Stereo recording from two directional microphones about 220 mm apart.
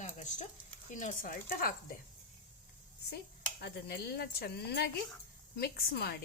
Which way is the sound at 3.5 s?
45° left (ahead or behind).